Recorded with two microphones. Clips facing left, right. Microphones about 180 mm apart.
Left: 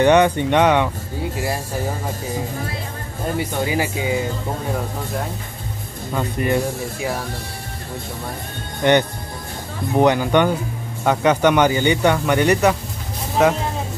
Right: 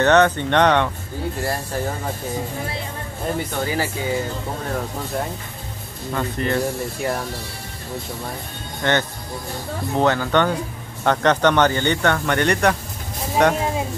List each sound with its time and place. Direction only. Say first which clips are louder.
0.0 s speech: left 2 dB; 10° left (ahead or behind)
3.3 s speech: left 4 dB; 15° left (ahead or behind)
6.1 s speech: left 2 dB; 10° left (ahead or behind)
8.8 s speech: left 5 dB; 15° left (ahead or behind)